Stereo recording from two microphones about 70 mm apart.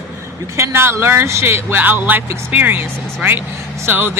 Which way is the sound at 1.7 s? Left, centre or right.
Right.